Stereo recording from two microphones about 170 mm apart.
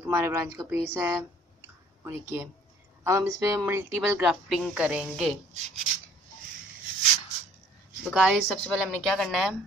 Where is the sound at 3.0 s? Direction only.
15° right (ahead or behind).